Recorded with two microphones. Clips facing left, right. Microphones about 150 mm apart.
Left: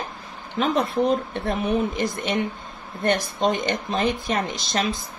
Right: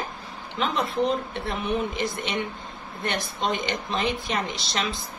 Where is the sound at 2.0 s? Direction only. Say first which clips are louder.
Left 4 dB; 45° left (ahead or behind).